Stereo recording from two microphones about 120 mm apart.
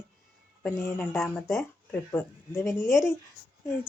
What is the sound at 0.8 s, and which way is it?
Speech, 20° left (ahead or behind).